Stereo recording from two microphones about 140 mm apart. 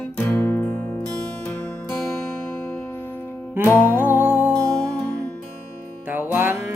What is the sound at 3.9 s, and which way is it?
Music, 15° right (ahead or behind).